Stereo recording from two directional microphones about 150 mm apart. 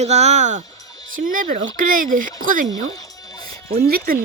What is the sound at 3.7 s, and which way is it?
Speech, 80° right.